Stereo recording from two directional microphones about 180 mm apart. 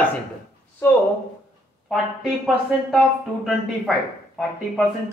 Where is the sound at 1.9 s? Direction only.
Centre (ahead or behind).